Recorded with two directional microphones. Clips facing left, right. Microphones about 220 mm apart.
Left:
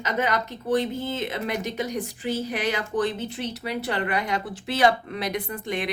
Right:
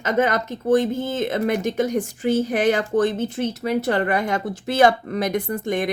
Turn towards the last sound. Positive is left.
turn(degrees=-45)  # may be behind; listen again after turning